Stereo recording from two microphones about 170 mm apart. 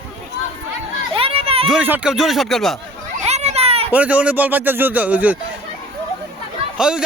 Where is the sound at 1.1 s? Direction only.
35° right (ahead or behind).